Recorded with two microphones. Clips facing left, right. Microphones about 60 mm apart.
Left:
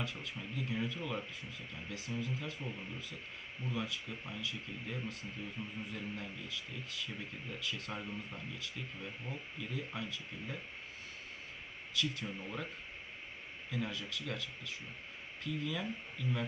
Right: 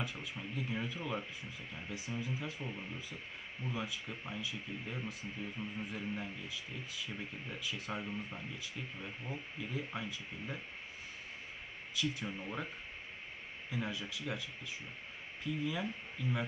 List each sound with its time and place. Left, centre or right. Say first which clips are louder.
0.0 s speech: even; centre
11.9 s speech: even; centre
13.7 s speech: even; centre